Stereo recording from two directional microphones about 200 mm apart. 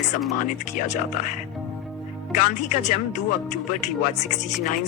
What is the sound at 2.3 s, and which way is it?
Speech, 40° left (ahead or behind).